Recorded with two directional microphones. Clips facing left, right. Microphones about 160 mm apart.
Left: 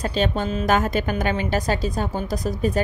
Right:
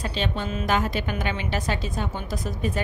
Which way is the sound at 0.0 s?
45° left (ahead or behind).